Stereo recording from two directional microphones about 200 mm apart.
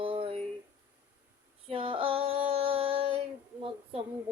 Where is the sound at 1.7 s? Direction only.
25° right (ahead or behind).